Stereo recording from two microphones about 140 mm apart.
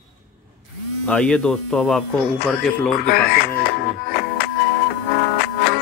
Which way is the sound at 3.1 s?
90° left.